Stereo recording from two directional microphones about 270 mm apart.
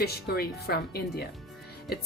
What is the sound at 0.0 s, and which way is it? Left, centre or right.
A woman's voice, left.